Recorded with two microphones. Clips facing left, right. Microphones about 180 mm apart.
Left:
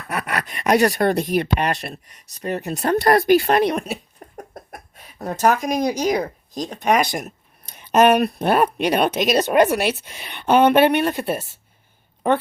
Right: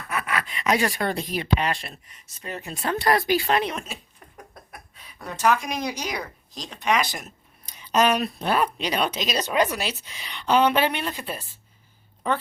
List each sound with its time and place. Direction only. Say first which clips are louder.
0.1 s dog: left 3 dB; 45° left (ahead or behind)
1.0 s speech: left 8 dB; 70° left (ahead or behind)
1.3 s speech: left 5 dB; 50° left (ahead or behind)